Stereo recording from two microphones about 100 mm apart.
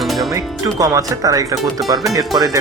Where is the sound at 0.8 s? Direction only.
35° right (ahead or behind).